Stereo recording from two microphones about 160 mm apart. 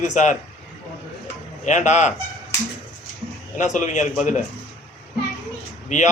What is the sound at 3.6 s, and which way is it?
Speech, 50° left (ahead or behind).